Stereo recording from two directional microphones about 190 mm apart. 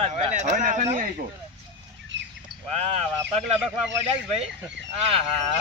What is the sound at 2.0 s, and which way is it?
Bird, 70° right (ahead or behind).